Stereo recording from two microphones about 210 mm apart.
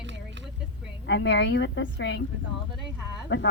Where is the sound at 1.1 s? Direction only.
55° left (ahead or behind).